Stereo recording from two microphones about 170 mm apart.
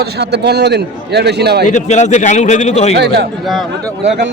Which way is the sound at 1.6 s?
45° left (ahead or behind).